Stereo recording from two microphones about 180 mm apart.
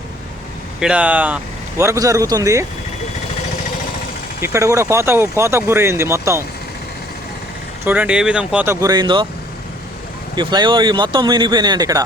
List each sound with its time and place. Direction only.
0.8 s speech: 5° right (ahead or behind)
4.4 s speech: 15° right (ahead or behind)
7.9 s speech: 10° right (ahead or behind); by 9.2 s 25° right (ahead or behind)
10.3 s speech: 25° right (ahead or behind)